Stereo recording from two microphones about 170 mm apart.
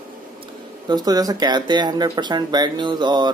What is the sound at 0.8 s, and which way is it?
Speech, 25° right (ahead or behind).